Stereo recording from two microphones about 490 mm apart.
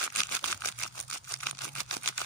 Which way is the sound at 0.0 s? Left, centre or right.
Left.